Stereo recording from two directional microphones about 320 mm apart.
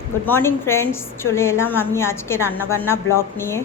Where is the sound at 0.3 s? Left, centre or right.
Centre.